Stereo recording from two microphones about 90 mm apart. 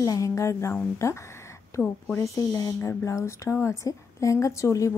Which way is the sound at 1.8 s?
15° left (ahead or behind).